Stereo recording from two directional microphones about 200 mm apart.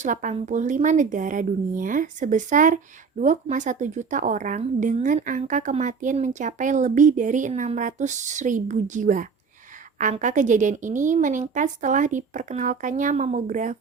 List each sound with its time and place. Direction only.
0.0 s a woman's voice: 40° right (ahead or behind)